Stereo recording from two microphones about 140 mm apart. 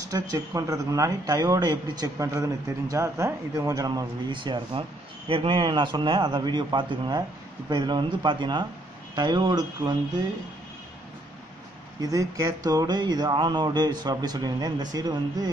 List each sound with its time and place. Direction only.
0.1 s a man's voice: 25° right (ahead or behind)
12.0 s speech: 25° right (ahead or behind)